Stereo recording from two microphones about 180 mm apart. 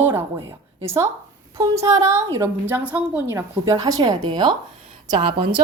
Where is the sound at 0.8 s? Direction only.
15° right (ahead or behind).